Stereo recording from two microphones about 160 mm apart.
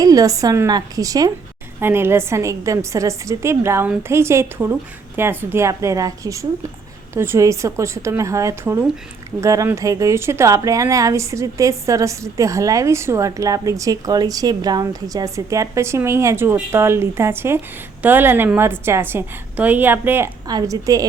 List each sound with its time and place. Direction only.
0.0 s a woman's voice: 20° right (ahead or behind)